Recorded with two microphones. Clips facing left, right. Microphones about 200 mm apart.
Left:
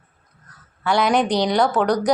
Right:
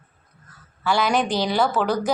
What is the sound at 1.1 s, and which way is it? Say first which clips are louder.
Speech: left 3 dB; 20° left (ahead or behind).